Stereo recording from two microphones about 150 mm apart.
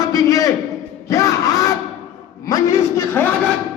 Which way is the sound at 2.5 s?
20° left (ahead or behind).